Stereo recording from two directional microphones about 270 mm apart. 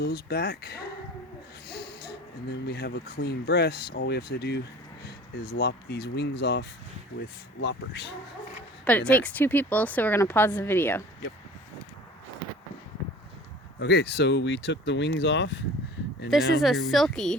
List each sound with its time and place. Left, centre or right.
0.0 s speech: left
8.8 s a woman's voice: centre
13.7 s speech: left
16.6 s a woman's voice: centre